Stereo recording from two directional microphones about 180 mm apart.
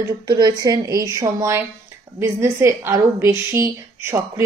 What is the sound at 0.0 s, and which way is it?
A woman's voice, 20° right (ahead or behind).